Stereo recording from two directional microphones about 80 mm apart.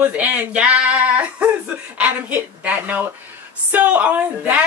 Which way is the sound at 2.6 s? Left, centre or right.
Centre.